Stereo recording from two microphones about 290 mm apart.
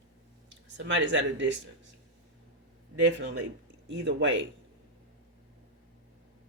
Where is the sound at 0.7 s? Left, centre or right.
Right.